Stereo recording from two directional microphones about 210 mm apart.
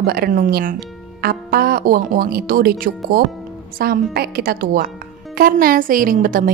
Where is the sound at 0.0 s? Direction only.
45° right (ahead or behind).